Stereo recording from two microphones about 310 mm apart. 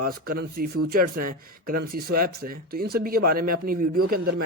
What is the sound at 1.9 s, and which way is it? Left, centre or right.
Speech, right.